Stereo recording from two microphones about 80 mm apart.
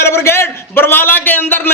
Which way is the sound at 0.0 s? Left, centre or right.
Left.